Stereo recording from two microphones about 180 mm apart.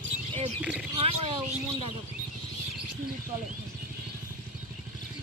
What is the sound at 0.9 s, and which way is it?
Speech, 30° right (ahead or behind).